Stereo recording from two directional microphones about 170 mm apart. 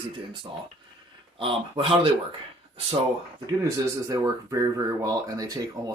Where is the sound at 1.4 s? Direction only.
30° right (ahead or behind).